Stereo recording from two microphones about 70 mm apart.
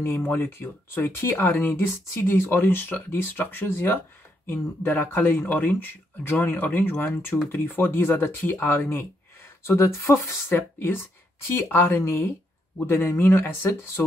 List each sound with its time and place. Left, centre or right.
0.0 s speech: left